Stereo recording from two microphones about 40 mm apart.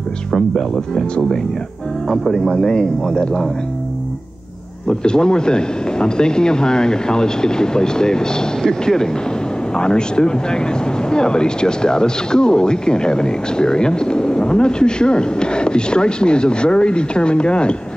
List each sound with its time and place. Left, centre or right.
0.3 s speech: centre
2.0 s speech: centre
4.8 s speech: centre